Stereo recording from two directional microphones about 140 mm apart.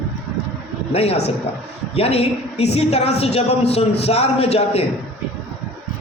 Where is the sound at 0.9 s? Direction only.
45° left (ahead or behind).